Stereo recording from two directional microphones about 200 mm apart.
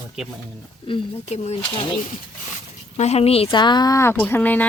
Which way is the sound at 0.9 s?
25° left (ahead or behind).